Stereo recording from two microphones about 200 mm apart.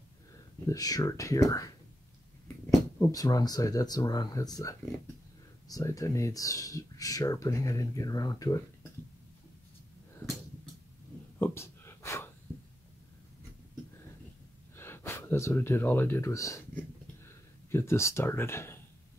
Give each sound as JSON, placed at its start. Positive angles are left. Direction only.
{"t": 0.7, "sound": "speech", "side_deg": 20}
{"t": 11.3, "sound": "a sound", "side_deg": 10}
{"t": 14.8, "sound": "speech", "side_deg": 10}